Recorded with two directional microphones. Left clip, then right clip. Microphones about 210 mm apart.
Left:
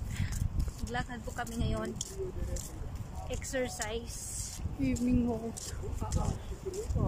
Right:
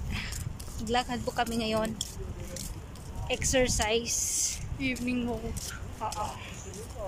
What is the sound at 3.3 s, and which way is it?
Speech, 5° right (ahead or behind).